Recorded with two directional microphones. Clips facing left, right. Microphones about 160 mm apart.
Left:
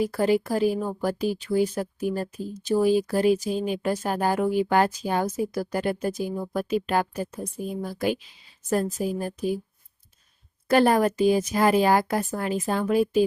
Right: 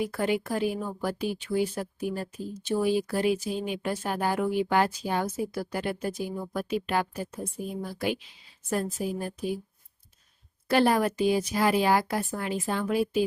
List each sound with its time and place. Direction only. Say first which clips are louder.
0.0 s speech: left 5 dB; 35° left (ahead or behind)
10.7 s speech: left 4 dB; 45° left (ahead or behind)